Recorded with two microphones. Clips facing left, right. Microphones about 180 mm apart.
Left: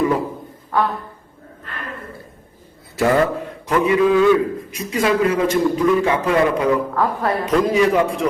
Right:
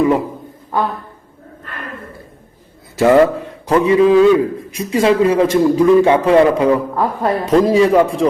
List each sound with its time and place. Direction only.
3.0 s a man's voice: 25° right (ahead or behind)